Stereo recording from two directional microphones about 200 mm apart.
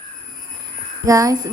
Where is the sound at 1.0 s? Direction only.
15° right (ahead or behind).